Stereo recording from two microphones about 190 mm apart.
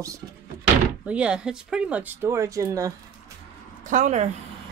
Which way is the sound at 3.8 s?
40° right (ahead or behind).